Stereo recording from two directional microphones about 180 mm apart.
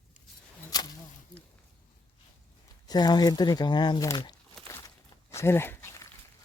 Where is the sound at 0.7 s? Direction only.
20° left (ahead or behind).